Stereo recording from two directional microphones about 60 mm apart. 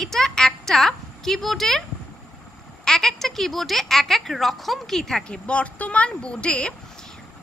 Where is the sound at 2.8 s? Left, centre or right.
Centre.